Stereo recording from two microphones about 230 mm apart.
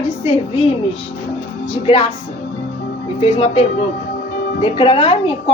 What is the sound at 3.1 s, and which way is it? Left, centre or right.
A woman's voice, left.